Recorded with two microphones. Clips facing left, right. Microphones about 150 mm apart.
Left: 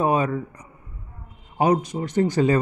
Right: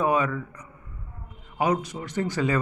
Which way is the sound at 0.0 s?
30° left (ahead or behind).